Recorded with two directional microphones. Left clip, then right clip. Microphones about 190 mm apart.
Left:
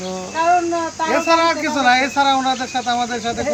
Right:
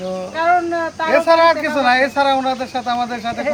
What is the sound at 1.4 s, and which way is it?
Speech, 30° right (ahead or behind).